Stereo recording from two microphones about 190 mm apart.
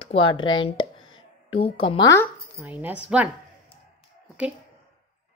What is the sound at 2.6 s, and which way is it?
Speech, 10° right (ahead or behind).